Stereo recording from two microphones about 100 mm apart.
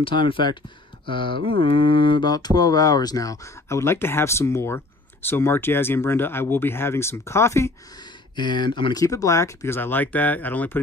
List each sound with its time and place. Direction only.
0.0 s speech: 55° left (ahead or behind)
1.0 s mantra: 60° left (ahead or behind); by 7.7 s 25° left (ahead or behind)
8.4 s speech: 50° left (ahead or behind)
8.9 s mantra: 35° left (ahead or behind); by 10.8 s 15° left (ahead or behind)